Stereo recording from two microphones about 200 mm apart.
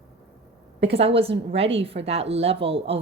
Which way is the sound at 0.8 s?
30° right (ahead or behind).